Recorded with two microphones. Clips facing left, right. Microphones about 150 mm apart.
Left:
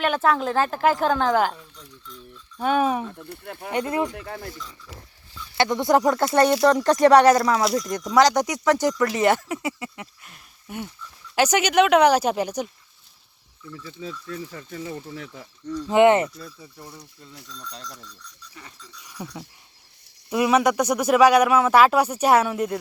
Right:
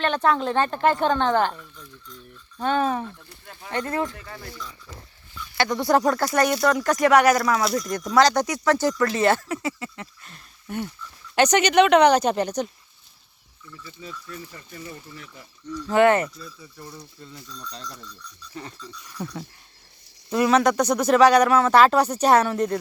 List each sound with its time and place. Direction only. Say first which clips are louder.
0.0 s a woman's voice: even; 5° left (ahead or behind)
2.6 s speech: left 2 dB; 10° left (ahead or behind)
3.1 s speech: left 8 dB; 55° left (ahead or behind)
3.7 s speech: left 2 dB; 15° left (ahead or behind)
4.1 s speech: left 5 dB; 55° left (ahead or behind)
5.5 s speech: left 1 dB; 20° left (ahead or behind)
8.1 s a woman's voice: left 1 dB; 15° left (ahead or behind)
13.8 s speech: left 4 dB; 90° left
15.9 s speech: left 2 dB; 20° left (ahead or behind)
17.3 s speech: even; 75° left (ahead or behind)
19.0 s speech: right 2 dB; 15° left (ahead or behind)